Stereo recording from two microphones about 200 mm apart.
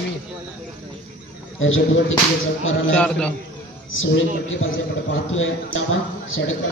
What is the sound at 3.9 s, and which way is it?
Speech, 75° left (ahead or behind).